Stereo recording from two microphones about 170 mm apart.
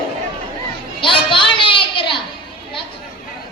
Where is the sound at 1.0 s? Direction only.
30° left (ahead or behind).